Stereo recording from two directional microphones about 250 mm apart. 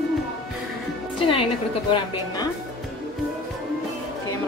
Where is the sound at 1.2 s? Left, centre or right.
Left.